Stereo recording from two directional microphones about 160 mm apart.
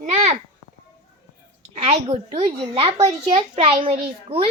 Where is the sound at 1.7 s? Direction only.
45° right (ahead or behind).